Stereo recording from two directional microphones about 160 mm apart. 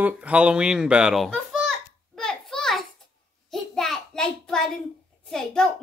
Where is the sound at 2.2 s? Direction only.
5° left (ahead or behind).